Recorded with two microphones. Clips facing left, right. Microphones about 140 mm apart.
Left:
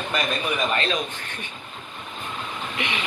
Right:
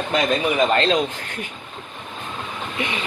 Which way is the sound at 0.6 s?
35° right (ahead or behind).